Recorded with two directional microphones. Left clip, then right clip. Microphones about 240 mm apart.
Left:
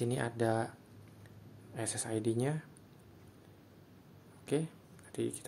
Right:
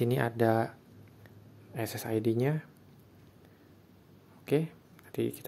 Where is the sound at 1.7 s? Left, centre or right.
Right.